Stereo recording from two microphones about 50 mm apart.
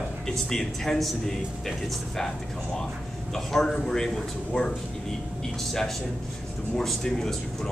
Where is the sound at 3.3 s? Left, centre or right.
Centre.